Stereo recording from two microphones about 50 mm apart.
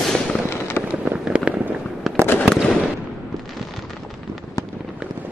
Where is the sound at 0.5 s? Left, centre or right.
Left.